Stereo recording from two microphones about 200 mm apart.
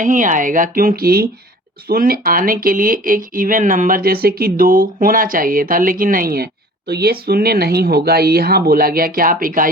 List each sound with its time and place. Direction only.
0.0 s speech: 40° right (ahead or behind)